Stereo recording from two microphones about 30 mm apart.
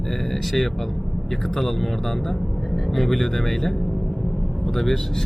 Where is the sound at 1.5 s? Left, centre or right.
Centre.